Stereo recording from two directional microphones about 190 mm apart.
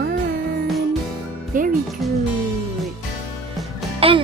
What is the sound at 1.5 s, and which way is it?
Speech, 45° right (ahead or behind).